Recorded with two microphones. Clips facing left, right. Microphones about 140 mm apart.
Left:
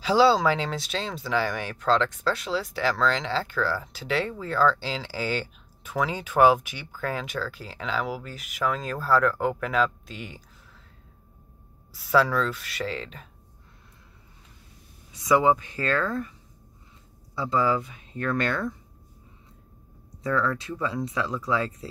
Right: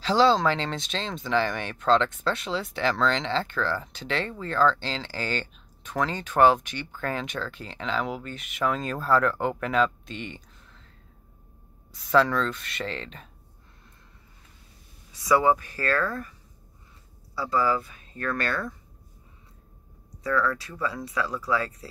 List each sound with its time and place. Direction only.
0.0 s speech: 10° left (ahead or behind)
11.9 s speech: 5° left (ahead or behind)
15.2 s speech: 20° left (ahead or behind)
17.4 s speech: 20° left (ahead or behind)
20.2 s speech: 25° left (ahead or behind)